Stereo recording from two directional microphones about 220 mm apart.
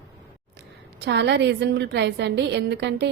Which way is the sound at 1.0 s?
50° right (ahead or behind).